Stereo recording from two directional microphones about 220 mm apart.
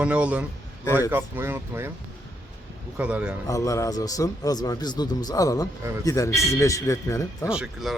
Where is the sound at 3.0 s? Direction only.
5° right (ahead or behind).